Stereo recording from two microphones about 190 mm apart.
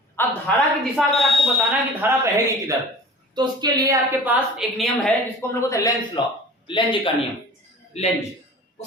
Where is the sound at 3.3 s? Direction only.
20° right (ahead or behind).